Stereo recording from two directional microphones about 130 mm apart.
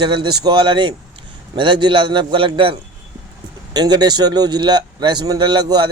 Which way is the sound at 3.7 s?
30° right (ahead or behind).